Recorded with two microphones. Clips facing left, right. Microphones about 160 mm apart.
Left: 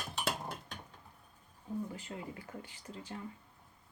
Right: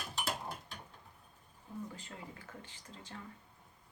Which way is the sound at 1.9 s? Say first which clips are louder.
Left 5 dB; 10° left (ahead or behind).